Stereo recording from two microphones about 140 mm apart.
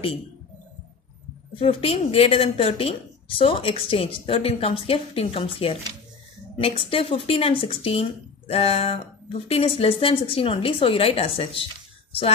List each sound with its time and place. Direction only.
1.6 s speech: 45° left (ahead or behind)